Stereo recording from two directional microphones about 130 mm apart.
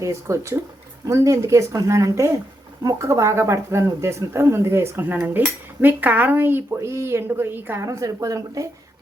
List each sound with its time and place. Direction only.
0.0 s speech: 25° right (ahead or behind)